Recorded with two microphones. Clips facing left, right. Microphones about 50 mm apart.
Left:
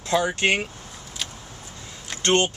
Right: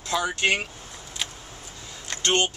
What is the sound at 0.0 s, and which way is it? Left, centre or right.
Speech, left.